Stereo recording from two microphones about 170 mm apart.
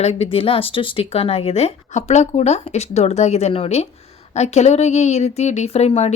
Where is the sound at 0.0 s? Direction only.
35° left (ahead or behind).